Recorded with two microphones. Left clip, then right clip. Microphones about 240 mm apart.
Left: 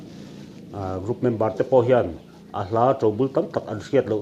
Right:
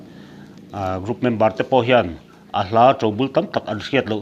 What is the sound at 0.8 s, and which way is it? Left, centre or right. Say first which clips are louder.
A man's voice: right 4 dB; right.